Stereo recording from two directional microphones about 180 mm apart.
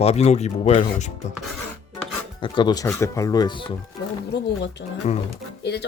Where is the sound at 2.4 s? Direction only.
25° left (ahead or behind).